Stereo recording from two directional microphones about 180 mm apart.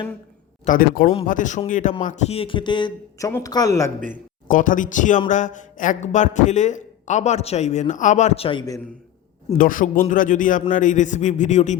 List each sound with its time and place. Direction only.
0.6 s a man's voice: 50° left (ahead or behind)
2.4 s speech: 25° left (ahead or behind)
4.4 s a man's voice: 50° left (ahead or behind); by 8.8 s 25° left (ahead or behind)
9.6 s a man's voice: 50° left (ahead or behind)